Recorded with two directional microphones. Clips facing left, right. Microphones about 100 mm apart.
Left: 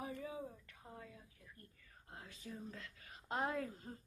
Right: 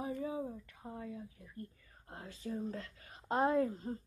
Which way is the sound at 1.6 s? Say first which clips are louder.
Right 13 dB; 35° right (ahead or behind).